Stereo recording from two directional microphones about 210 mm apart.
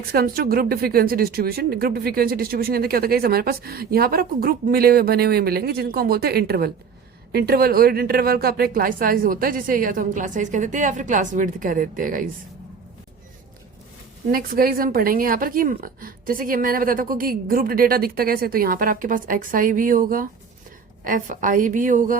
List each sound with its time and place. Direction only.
0.1 s a woman's voice: 45° right (ahead or behind)
14.3 s a woman's voice: 45° right (ahead or behind)